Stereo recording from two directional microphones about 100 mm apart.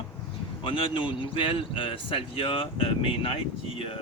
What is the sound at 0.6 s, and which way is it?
Speech, 55° left (ahead or behind).